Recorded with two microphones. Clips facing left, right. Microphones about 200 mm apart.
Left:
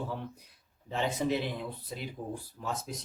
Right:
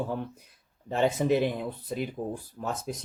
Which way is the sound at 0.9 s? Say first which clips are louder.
Right 6 dB; 50° right (ahead or behind).